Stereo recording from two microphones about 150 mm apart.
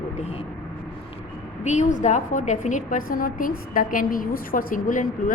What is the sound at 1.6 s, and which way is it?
A woman's voice, 50° left (ahead or behind).